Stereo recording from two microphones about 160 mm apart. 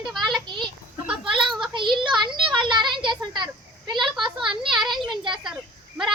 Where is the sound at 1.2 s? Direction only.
30° right (ahead or behind).